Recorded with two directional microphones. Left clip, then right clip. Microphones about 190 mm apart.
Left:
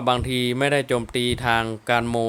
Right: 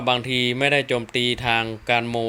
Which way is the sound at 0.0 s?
15° left (ahead or behind).